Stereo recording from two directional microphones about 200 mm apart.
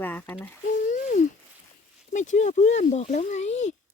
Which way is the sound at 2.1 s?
35° left (ahead or behind).